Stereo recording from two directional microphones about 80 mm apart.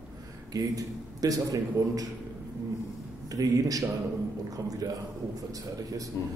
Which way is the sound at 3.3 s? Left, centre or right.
Right.